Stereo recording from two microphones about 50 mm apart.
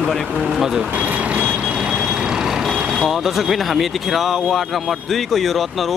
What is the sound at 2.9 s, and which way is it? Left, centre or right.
Speech, centre.